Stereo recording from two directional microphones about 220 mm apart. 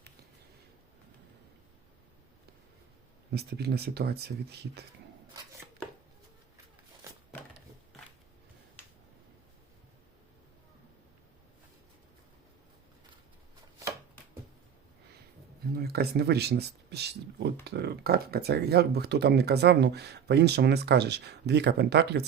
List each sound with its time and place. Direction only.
3.3 s speech: 45° right (ahead or behind)
15.7 s speech: 45° right (ahead or behind)